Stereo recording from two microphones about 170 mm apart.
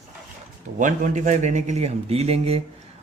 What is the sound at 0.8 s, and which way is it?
A man's voice, 45° right (ahead or behind).